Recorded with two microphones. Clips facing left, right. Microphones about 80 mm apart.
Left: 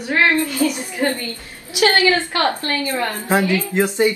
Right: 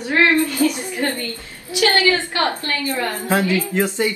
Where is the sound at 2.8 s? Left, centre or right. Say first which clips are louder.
Right 2 dB; left.